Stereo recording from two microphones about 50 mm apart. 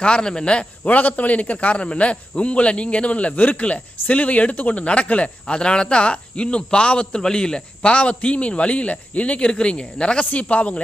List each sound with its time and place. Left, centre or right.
0.0 s speech: centre
0.9 s speech: left